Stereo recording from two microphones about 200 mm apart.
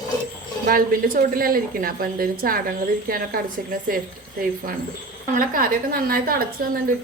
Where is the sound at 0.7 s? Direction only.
45° right (ahead or behind).